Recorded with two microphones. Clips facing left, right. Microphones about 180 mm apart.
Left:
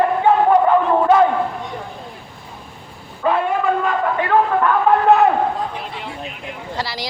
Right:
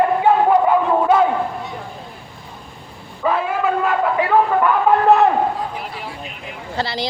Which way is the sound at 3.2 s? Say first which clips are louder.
Left 1 dB; centre (ahead or behind).